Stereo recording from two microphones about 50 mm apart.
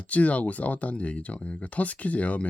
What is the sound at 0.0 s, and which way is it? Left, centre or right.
Speech, left.